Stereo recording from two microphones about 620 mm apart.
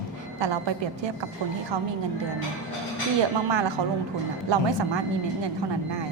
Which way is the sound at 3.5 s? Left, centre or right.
Right.